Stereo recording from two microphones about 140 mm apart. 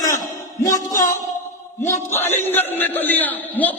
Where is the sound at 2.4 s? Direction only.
15° left (ahead or behind).